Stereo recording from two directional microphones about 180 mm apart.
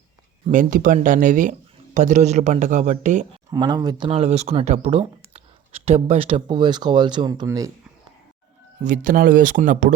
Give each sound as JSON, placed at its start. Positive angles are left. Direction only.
{"t": 0.4, "sound": "speech", "side_deg": -50}
{"t": 3.5, "sound": "speech", "side_deg": -20}
{"t": 8.8, "sound": "speech", "side_deg": -45}